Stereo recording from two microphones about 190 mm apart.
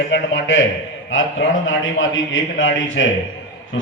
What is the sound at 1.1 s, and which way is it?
Speech, 85° left.